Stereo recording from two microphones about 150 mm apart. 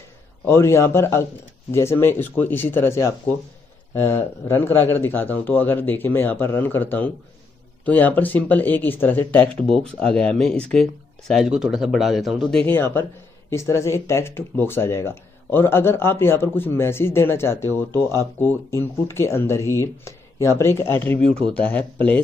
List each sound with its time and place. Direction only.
0.5 s speech: 15° left (ahead or behind)